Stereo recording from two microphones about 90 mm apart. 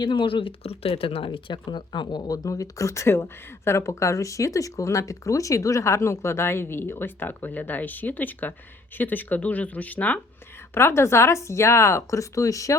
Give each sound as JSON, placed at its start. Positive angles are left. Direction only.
{"t": 0.0, "sound": "speech", "side_deg": 60}
{"t": 10.8, "sound": "speech", "side_deg": 30}